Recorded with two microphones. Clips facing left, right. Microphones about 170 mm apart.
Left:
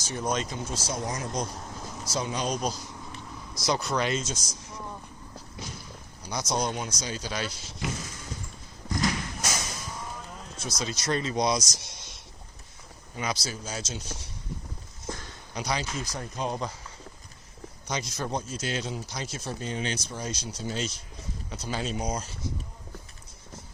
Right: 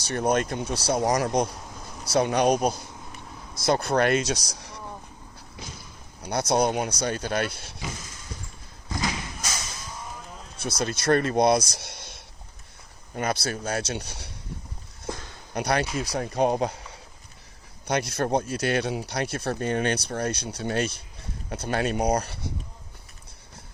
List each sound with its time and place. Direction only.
0.0 s speech: 65° right (ahead or behind)
6.2 s speech: 60° right (ahead or behind)
10.6 s speech: 60° right (ahead or behind)
15.5 s speech: 60° right (ahead or behind)
17.8 s speech: 60° right (ahead or behind)